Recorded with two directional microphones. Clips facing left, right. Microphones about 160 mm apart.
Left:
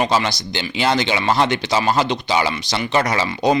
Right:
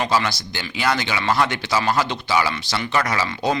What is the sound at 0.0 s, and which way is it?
Speech, 20° left (ahead or behind).